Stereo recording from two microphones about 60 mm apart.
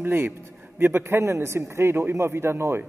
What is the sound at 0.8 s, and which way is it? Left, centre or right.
A man's voice, right.